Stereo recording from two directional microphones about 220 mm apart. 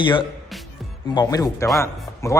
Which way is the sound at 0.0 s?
20° left (ahead or behind).